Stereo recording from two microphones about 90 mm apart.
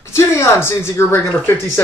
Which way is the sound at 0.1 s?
30° left (ahead or behind).